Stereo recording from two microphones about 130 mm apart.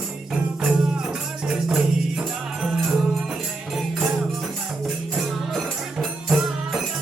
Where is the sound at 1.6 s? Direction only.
5° right (ahead or behind).